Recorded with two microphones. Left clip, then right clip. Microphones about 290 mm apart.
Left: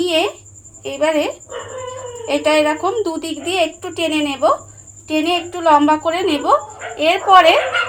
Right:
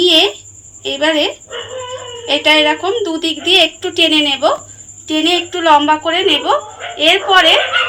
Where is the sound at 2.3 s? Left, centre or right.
Left.